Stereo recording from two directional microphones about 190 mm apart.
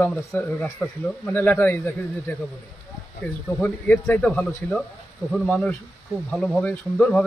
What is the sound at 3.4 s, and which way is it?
Speech, 5° left (ahead or behind).